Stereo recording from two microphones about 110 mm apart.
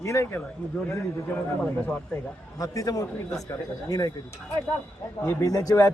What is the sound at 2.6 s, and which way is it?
Speech, 30° left (ahead or behind).